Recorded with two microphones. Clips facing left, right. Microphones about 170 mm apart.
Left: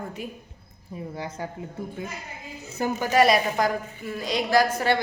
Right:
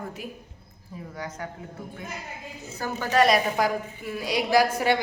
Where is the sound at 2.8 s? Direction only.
20° left (ahead or behind).